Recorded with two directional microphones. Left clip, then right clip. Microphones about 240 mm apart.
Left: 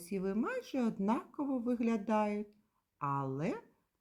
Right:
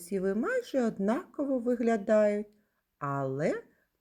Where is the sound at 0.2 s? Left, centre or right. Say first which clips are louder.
Right 7 dB; centre.